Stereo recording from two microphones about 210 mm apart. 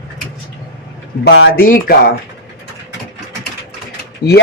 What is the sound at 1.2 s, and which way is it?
Speech, 55° left (ahead or behind).